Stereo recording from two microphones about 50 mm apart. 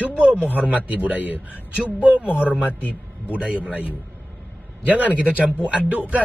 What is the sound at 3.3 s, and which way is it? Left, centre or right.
Speech, right.